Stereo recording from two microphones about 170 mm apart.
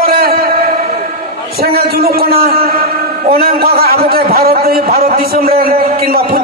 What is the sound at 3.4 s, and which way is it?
A man's voice, 60° right (ahead or behind).